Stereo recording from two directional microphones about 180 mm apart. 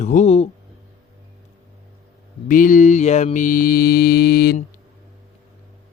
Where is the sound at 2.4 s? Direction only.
50° left (ahead or behind).